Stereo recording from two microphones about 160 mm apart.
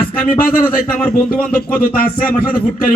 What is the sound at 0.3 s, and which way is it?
A man's voice, 65° left (ahead or behind).